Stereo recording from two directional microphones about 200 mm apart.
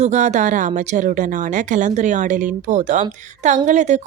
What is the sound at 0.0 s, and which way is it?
Speech, 35° right (ahead or behind).